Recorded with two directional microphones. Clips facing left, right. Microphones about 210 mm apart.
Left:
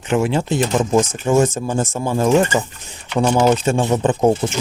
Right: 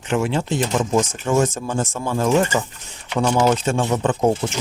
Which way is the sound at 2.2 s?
15° left (ahead or behind).